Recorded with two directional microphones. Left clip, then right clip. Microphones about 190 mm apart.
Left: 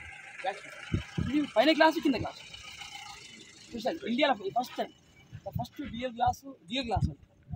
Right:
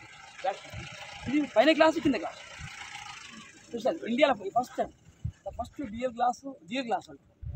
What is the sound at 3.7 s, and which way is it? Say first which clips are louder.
Speech: right 3 dB; 5° right (ahead or behind).